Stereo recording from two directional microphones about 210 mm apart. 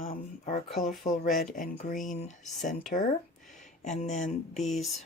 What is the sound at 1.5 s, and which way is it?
Speech, 40° left (ahead or behind).